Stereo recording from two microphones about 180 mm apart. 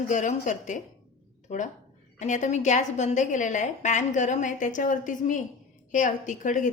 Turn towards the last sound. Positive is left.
turn(degrees=45)  # may be behind; listen again after turning